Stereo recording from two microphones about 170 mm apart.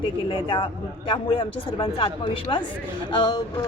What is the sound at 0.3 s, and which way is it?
A child's voice, 30° left (ahead or behind).